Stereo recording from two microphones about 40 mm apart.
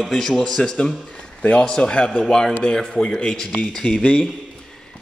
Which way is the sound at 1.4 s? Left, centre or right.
Left.